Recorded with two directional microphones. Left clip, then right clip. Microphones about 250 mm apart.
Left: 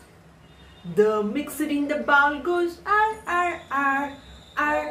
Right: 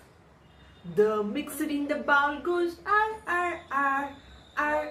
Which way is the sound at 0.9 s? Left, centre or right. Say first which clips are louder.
Left 4 dB; centre.